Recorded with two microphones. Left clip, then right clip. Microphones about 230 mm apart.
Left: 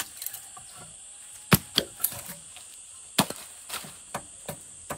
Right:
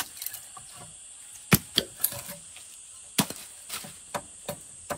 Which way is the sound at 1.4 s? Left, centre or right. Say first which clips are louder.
Left 1 dB; centre.